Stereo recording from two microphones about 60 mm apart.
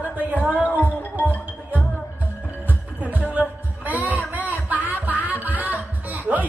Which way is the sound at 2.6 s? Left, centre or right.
Right.